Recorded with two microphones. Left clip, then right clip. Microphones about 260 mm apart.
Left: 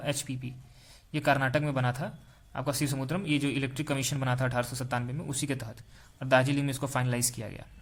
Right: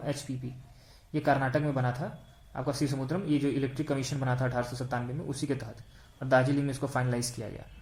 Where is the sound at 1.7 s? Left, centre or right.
Left.